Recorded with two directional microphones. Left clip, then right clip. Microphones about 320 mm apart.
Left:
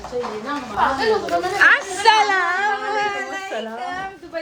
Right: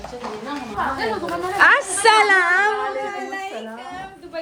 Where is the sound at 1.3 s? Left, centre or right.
Centre.